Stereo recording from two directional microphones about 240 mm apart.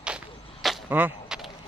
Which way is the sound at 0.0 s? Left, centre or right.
Centre.